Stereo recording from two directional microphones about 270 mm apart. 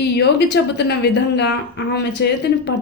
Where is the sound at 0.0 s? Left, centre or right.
Left.